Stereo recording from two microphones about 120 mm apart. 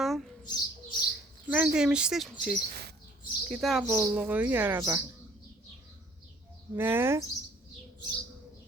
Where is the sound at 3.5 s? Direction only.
Centre (ahead or behind).